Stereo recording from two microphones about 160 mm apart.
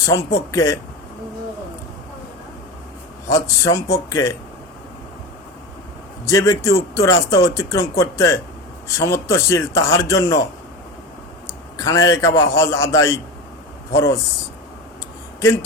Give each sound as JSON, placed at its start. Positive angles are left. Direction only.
{"t": 0.0, "sound": "speech", "side_deg": 20}
{"t": 3.2, "sound": "speech", "side_deg": 20}
{"t": 6.2, "sound": "speech", "side_deg": 20}
{"t": 11.8, "sound": "speech", "side_deg": 20}